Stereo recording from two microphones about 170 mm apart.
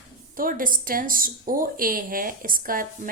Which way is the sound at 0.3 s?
55° right (ahead or behind).